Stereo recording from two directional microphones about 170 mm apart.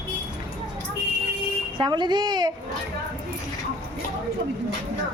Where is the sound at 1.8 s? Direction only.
25° right (ahead or behind).